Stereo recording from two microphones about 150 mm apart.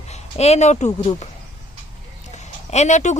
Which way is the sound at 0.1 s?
45° left (ahead or behind).